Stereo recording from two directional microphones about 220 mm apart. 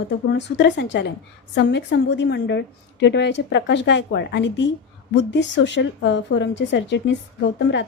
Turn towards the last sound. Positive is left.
turn(degrees=55)  # may be behind; listen again after turning